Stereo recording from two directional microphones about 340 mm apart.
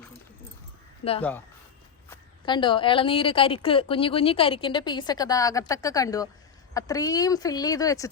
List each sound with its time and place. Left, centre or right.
1.0 s speech: left
2.0 s a woman's voice: centre